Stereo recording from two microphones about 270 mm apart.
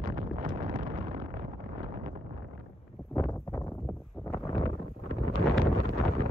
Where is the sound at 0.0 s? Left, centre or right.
Right.